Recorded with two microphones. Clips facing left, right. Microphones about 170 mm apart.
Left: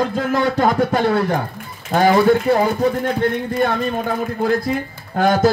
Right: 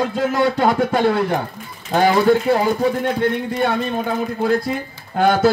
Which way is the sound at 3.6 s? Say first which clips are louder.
Left 1 dB; 45° left (ahead or behind).